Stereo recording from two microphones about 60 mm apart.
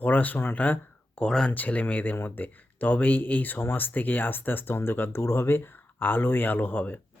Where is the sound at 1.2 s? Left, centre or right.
Centre.